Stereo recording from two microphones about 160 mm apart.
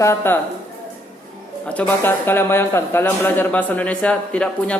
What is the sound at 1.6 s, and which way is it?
A man's voice, 10° left (ahead or behind).